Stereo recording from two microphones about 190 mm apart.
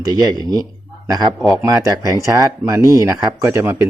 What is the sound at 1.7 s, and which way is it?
Speech, 15° right (ahead or behind).